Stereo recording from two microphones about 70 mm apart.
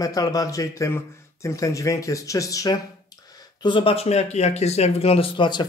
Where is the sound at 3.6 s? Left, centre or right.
Left.